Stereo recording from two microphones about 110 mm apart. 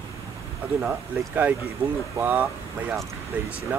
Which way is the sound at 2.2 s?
15° right (ahead or behind).